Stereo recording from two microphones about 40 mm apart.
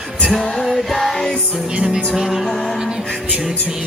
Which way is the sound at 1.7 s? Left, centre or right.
Centre.